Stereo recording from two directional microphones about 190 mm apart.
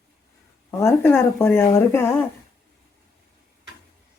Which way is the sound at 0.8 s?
10° left (ahead or behind).